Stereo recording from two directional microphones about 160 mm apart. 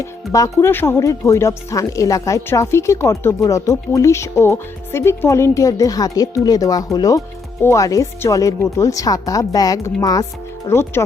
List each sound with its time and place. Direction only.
0.0 s speech: 20° left (ahead or behind)